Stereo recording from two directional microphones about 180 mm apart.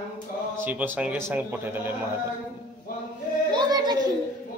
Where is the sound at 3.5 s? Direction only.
25° right (ahead or behind).